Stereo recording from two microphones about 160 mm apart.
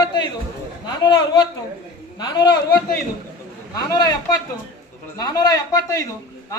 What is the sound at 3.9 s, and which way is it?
A man's voice, 25° left (ahead or behind).